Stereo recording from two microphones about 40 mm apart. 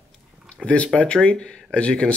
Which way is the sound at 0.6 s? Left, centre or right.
Left.